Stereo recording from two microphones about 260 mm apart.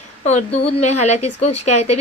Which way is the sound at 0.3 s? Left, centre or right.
Left.